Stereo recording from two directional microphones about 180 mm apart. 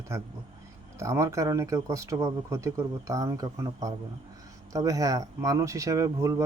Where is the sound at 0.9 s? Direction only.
15° right (ahead or behind).